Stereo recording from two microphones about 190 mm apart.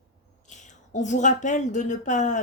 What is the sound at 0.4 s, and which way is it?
A woman's voice, 40° left (ahead or behind).